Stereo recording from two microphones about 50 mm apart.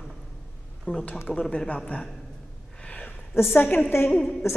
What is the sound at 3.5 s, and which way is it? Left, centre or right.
Speech, left.